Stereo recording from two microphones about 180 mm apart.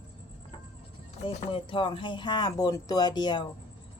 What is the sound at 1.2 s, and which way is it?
A woman's voice, 30° left (ahead or behind).